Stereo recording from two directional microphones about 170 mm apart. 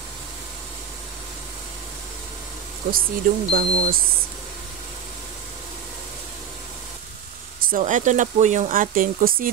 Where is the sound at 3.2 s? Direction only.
55° right (ahead or behind).